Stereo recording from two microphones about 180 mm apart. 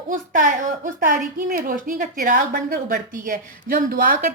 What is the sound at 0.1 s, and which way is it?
A woman's voice, 45° right (ahead or behind).